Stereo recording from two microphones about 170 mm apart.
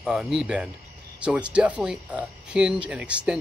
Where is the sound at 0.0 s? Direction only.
5° right (ahead or behind).